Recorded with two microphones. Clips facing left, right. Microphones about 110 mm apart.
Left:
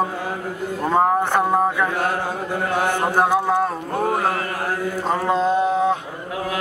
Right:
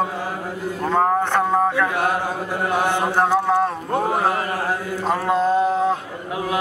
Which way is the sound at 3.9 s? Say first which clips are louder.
Right 1 dB; 20° right (ahead or behind).